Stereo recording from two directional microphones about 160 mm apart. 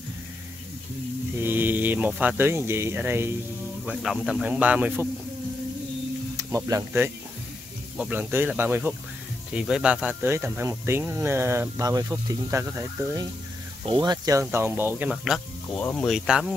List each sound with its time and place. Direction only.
1.4 s speech: 10° right (ahead or behind)
6.3 s speech: 20° right (ahead or behind)
13.8 s speech: 30° right (ahead or behind); by 15.8 s centre (ahead or behind)
15.8 s speech: 10° left (ahead or behind)
16.1 s speech: 5° right (ahead or behind)